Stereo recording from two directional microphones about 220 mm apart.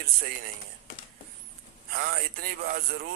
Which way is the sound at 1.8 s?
40° right (ahead or behind).